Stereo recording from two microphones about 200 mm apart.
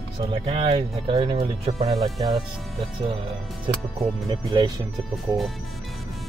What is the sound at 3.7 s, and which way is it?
Speech, 25° right (ahead or behind).